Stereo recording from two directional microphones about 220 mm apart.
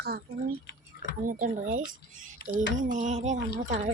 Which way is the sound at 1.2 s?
35° right (ahead or behind).